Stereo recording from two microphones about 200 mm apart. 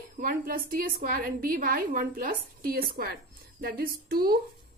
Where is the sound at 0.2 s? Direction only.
45° right (ahead or behind).